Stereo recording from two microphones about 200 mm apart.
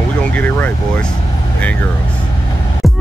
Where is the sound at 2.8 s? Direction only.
Centre (ahead or behind).